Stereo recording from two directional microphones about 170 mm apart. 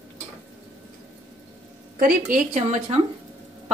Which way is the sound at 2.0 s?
55° right (ahead or behind).